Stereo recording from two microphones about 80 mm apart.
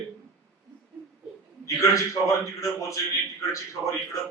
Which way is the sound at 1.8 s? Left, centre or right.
Left.